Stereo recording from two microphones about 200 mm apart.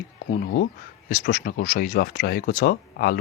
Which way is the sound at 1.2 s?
45° left (ahead or behind).